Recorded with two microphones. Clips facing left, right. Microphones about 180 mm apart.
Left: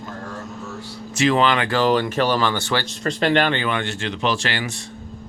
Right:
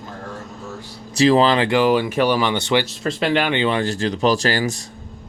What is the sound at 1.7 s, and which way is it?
Speech, 10° right (ahead or behind).